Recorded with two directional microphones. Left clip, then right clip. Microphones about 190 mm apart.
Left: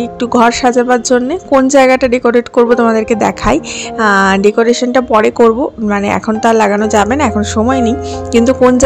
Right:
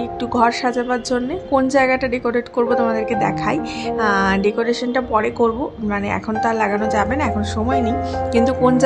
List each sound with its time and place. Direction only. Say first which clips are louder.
0.2 s a woman's voice: left 8 dB; 40° left (ahead or behind)